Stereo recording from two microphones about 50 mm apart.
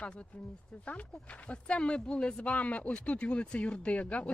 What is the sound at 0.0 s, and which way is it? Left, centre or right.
Speech, left.